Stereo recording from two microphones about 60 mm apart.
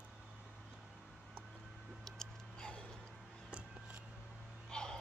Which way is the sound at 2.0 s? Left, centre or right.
Centre.